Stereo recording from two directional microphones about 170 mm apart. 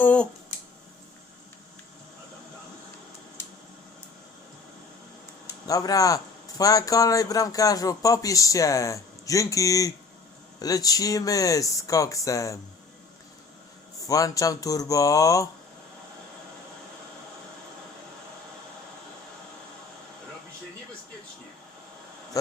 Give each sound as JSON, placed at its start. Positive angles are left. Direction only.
{"t": 0.0, "sound": "speech", "side_deg": 10}
{"t": 5.6, "sound": "speech", "side_deg": 20}
{"t": 14.1, "sound": "speech", "side_deg": 20}